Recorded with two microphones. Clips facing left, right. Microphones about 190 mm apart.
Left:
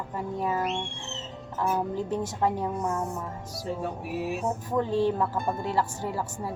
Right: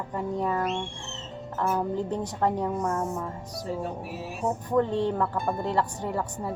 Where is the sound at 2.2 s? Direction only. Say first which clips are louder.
Right 1 dB; 5° left (ahead or behind).